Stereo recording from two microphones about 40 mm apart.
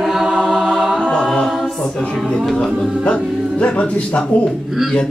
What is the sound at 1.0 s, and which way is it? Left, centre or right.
A capella, left.